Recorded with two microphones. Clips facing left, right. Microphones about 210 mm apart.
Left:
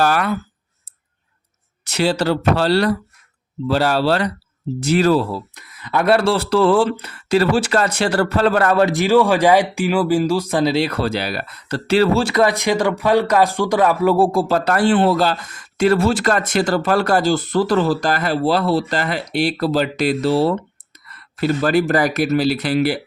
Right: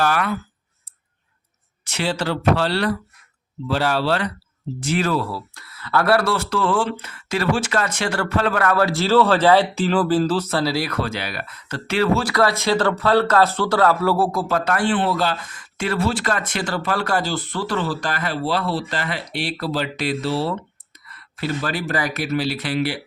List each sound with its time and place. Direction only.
0.0 s speech: 35° left (ahead or behind)
1.8 s speech: 40° left (ahead or behind)
12.3 s speech: 20° left (ahead or behind); by 23.0 s 40° left (ahead or behind)